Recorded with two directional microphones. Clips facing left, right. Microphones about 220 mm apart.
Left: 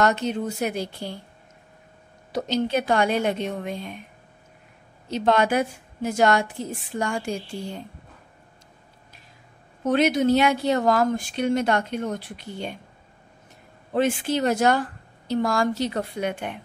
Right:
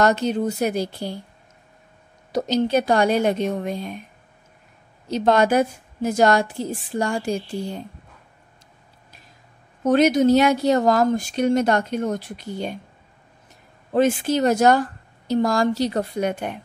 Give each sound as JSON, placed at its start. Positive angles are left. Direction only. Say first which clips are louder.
{"t": 0.0, "sound": "speech", "louder": "right 3 dB", "side_deg": -40}
{"t": 2.3, "sound": "speech", "louder": "right 4 dB", "side_deg": -40}
{"t": 5.1, "sound": "speech", "louder": "right 3 dB", "side_deg": -40}
{"t": 9.8, "sound": "speech", "louder": "right 4 dB", "side_deg": -45}
{"t": 13.9, "sound": "speech", "louder": "right 4 dB", "side_deg": -40}